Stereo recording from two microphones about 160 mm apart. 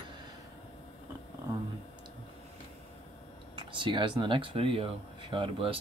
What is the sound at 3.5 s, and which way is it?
Speech, 30° right (ahead or behind).